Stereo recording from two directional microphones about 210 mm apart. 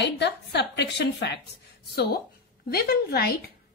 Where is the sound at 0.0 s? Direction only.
55° left (ahead or behind).